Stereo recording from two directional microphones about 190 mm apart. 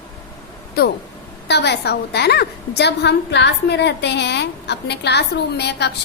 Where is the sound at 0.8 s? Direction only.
55° left (ahead or behind).